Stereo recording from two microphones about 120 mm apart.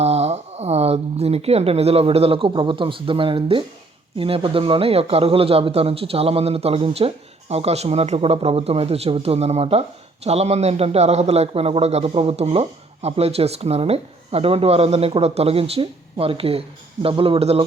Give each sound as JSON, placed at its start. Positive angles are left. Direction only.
{"t": 0.0, "sound": "a man's voice", "side_deg": -60}